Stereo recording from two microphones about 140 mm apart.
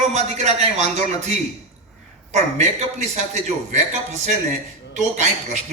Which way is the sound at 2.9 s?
55° right (ahead or behind).